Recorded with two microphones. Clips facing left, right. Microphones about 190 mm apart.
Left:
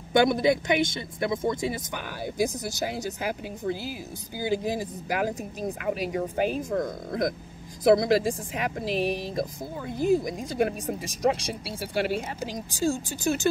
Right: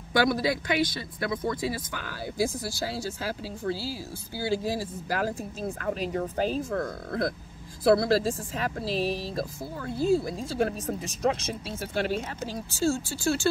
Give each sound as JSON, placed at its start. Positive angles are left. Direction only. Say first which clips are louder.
{"t": 0.1, "sound": "speech", "louder": "left 4 dB", "side_deg": 20}